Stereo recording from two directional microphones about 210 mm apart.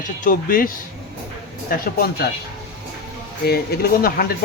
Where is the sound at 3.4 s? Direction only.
50° left (ahead or behind).